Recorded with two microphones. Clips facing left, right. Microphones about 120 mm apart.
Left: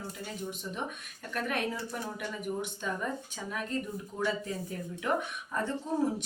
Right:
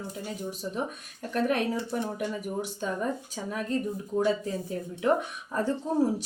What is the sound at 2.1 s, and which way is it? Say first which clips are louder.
Speech: right 4 dB; 40° right (ahead or behind).